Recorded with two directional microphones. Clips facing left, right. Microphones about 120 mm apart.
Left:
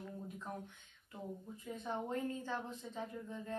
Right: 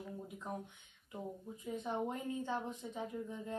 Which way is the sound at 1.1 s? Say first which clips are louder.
Right 2 dB; 15° right (ahead or behind).